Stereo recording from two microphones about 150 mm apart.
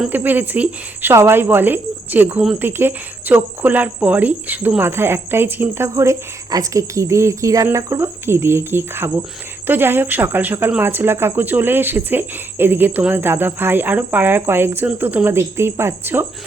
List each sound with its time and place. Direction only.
0.0 s speech: 10° right (ahead or behind)